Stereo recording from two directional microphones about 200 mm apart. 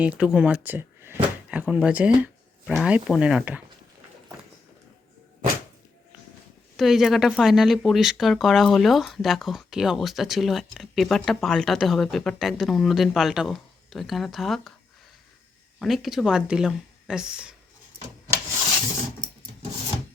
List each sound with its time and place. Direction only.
0.0 s speech: 5° right (ahead or behind)
6.7 s speech: centre (ahead or behind)
15.8 s speech: centre (ahead or behind)